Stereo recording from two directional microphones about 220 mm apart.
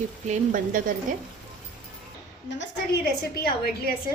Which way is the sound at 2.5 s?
50° left (ahead or behind).